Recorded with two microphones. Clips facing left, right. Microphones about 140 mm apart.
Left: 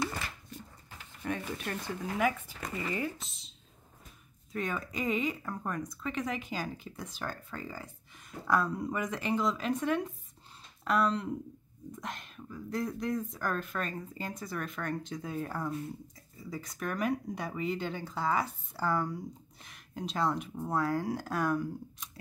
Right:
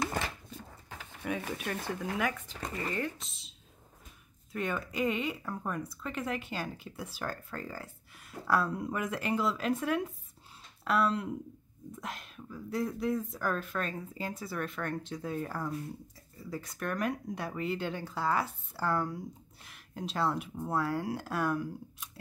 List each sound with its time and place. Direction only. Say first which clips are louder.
1.7 s speech: right 1 dB; centre (ahead or behind)